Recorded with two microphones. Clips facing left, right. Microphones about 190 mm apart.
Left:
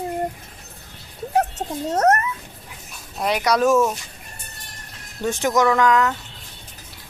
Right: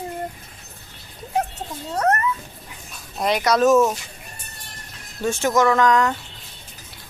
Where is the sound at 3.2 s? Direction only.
10° left (ahead or behind).